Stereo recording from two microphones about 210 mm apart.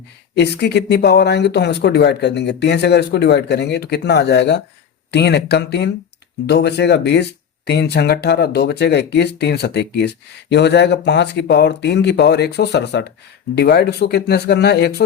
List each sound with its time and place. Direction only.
0.3 s speech: 55° left (ahead or behind)